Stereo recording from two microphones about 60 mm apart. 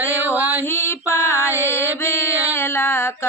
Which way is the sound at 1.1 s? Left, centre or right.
Left.